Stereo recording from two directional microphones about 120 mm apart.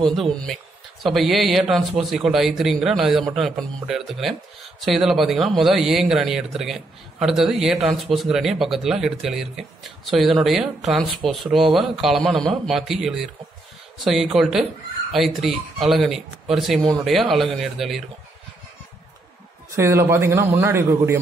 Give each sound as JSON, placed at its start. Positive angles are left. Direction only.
{"t": 0.0, "sound": "a man's voice", "side_deg": 0}
{"t": 19.7, "sound": "a man's voice", "side_deg": -25}